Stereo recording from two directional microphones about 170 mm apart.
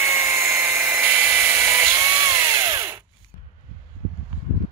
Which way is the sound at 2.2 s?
20° right (ahead or behind).